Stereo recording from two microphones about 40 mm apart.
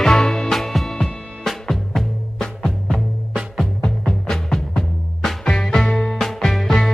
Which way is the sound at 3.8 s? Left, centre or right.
Centre.